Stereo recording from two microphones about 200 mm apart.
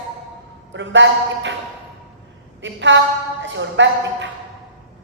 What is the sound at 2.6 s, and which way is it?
A woman's voice, 65° right (ahead or behind).